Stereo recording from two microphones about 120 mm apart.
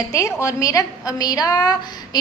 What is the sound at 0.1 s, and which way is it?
A woman's voice, 25° left (ahead or behind).